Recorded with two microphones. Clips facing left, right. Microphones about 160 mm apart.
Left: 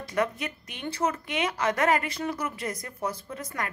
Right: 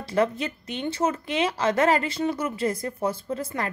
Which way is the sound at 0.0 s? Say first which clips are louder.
Right 4 dB; 30° right (ahead or behind).